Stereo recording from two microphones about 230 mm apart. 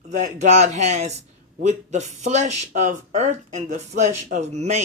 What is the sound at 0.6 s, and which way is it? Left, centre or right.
Speech, right.